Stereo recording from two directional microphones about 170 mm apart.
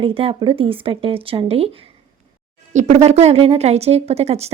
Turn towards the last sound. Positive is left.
turn(degrees=-40)  # may be behind; listen again after turning